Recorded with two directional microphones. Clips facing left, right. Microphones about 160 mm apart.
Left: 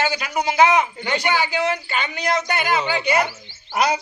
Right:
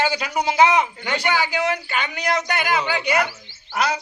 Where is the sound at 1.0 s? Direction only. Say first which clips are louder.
Left 1 dB; 5° right (ahead or behind).